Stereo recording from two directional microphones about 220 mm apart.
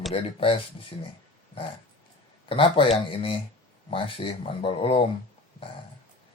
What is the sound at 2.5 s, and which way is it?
Speech, 25° left (ahead or behind).